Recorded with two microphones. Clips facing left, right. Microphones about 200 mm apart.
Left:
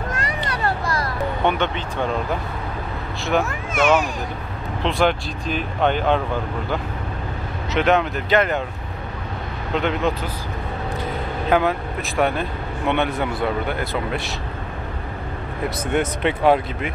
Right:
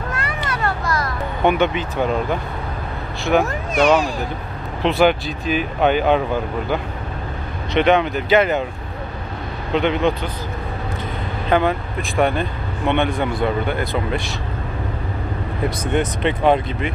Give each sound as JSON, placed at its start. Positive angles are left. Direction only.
{"t": 0.1, "sound": "children playing", "side_deg": 35}
{"t": 1.4, "sound": "speech", "side_deg": -10}
{"t": 3.3, "sound": "speech", "side_deg": -5}
{"t": 4.8, "sound": "speech", "side_deg": -5}
{"t": 7.7, "sound": "speech", "side_deg": 0}
{"t": 9.8, "sound": "speech", "side_deg": 0}
{"t": 11.4, "sound": "speech", "side_deg": 5}
{"t": 15.8, "sound": "speech", "side_deg": 10}